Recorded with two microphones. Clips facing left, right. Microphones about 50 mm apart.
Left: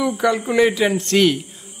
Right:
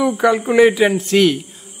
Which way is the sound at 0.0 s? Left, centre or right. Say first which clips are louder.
Right 4 dB; centre.